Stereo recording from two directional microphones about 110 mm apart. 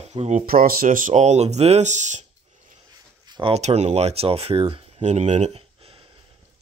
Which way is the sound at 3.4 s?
70° right (ahead or behind).